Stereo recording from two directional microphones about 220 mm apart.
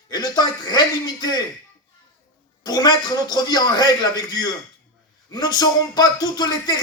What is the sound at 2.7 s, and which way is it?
Speech, 20° left (ahead or behind).